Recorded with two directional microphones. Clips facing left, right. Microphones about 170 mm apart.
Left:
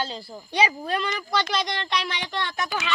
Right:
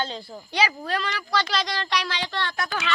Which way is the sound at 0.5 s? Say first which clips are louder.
Left 1 dB; 20° left (ahead or behind).